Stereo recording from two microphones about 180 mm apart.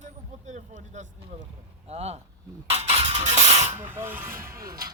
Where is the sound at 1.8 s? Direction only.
35° right (ahead or behind).